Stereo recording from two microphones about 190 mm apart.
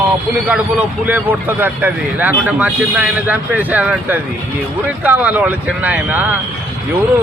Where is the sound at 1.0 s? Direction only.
10° right (ahead or behind).